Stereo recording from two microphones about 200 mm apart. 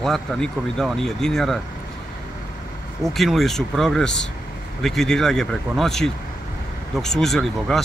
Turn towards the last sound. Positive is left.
turn(degrees=0)  # may be behind; listen again after turning